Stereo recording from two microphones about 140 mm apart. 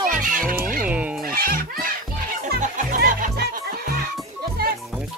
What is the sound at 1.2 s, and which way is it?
Goat, 90° right.